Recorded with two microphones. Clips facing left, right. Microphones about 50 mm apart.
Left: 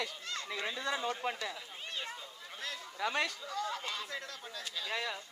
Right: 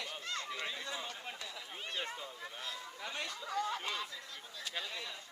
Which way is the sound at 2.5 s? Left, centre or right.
Left.